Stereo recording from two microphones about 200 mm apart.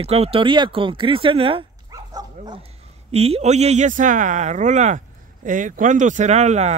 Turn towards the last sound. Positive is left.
turn(degrees=-35)  # may be behind; listen again after turning